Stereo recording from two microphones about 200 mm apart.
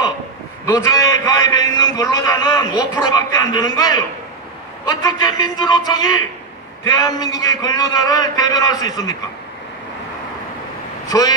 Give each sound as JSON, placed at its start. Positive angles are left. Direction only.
{"t": 0.7, "sound": "a man's voice", "side_deg": 15}
{"t": 11.1, "sound": "speech", "side_deg": 20}